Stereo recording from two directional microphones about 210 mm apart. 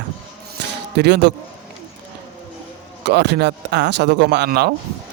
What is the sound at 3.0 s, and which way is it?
Speech, 50° right (ahead or behind).